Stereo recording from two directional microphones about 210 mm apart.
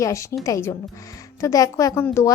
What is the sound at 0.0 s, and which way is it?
Speech, 15° left (ahead or behind).